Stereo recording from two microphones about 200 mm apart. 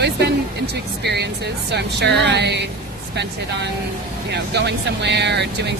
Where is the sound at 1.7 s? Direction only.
60° right (ahead or behind).